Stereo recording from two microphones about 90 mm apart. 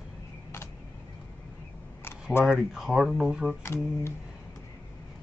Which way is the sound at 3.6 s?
30° left (ahead or behind).